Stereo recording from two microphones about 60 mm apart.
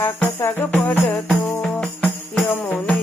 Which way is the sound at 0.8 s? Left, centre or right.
Left.